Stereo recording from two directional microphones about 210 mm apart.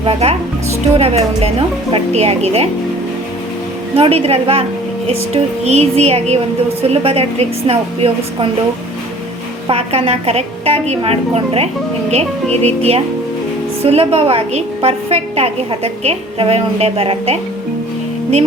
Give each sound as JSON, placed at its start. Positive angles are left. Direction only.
{"t": 0.0, "sound": "a woman's voice", "side_deg": -30}
{"t": 3.9, "sound": "a woman's voice", "side_deg": -30}
{"t": 9.6, "sound": "a woman's voice", "side_deg": -25}